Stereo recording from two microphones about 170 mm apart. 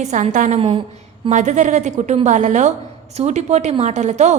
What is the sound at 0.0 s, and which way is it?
A woman's voice, 45° right (ahead or behind).